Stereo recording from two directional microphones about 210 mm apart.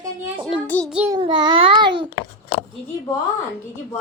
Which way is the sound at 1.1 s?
20° right (ahead or behind).